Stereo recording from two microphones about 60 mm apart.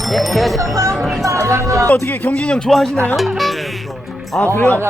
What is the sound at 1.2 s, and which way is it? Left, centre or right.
Music, right.